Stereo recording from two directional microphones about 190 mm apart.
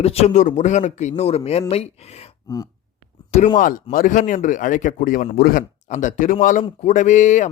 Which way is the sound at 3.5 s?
45° left (ahead or behind).